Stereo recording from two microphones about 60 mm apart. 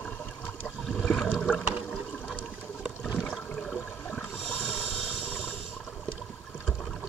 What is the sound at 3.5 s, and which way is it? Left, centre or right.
Toilet flush, centre.